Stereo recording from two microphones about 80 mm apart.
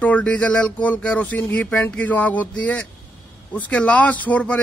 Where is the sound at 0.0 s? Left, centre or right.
Centre.